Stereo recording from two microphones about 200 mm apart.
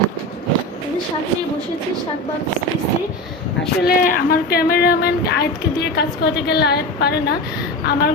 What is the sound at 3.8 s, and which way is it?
A woman's voice, 45° left (ahead or behind).